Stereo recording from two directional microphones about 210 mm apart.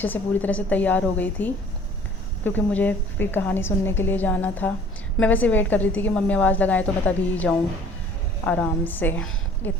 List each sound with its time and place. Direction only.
0.0 s a woman's voice: 10° left (ahead or behind)